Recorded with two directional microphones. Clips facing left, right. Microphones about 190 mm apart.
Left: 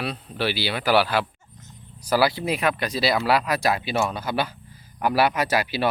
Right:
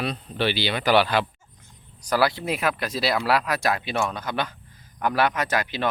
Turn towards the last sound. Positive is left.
turn(degrees=10)  # may be behind; listen again after turning